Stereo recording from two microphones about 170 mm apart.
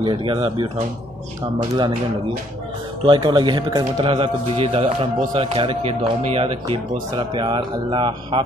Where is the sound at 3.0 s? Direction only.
25° right (ahead or behind).